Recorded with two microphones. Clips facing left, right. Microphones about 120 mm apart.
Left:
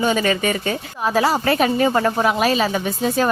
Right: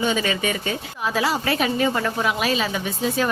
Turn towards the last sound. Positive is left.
turn(degrees=40)  # may be behind; listen again after turning